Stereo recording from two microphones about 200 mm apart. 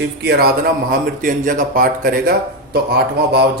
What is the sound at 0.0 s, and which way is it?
Speech, 55° right (ahead or behind).